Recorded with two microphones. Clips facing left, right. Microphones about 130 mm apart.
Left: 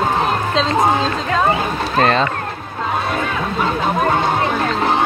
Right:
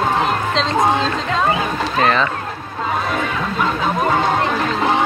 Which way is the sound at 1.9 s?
40° left (ahead or behind).